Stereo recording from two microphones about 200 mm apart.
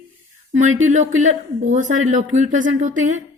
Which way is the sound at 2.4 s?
40° right (ahead or behind).